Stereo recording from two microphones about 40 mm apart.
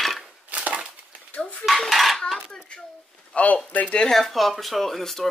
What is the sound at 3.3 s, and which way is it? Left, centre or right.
Speech, left.